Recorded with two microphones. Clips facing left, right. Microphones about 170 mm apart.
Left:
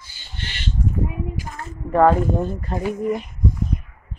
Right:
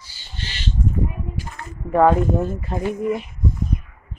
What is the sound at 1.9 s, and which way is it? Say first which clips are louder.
Speech: even; 5° right (ahead or behind).